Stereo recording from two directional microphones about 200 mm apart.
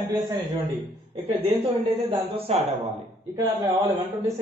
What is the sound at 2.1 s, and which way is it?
Speech, 30° right (ahead or behind).